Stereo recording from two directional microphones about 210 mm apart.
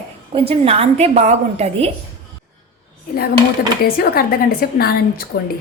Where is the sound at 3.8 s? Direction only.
45° left (ahead or behind).